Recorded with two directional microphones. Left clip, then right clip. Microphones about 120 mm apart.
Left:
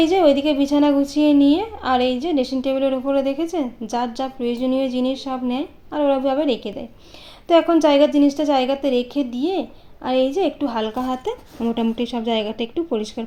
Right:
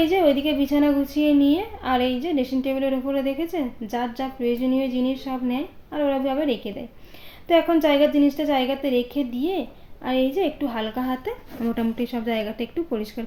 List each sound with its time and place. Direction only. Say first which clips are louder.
0.0 s a woman's voice: left 4 dB; 40° left (ahead or behind)